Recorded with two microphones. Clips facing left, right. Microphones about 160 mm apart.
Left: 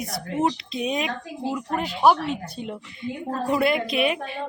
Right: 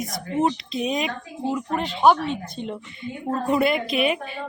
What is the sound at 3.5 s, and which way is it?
Speech, centre (ahead or behind).